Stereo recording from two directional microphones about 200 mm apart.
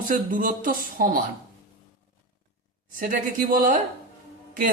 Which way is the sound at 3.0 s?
45° right (ahead or behind).